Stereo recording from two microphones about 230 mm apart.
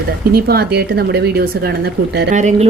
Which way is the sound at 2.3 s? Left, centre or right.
Right.